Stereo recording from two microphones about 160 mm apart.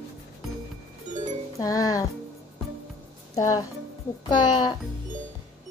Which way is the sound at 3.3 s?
20° left (ahead or behind).